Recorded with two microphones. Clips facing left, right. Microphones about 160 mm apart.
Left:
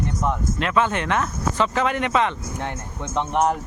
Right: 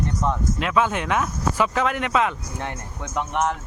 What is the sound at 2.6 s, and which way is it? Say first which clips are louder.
Speech: left 2 dB; 25° left (ahead or behind).